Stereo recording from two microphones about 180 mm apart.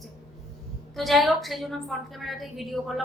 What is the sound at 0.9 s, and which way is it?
A woman's voice, centre (ahead or behind).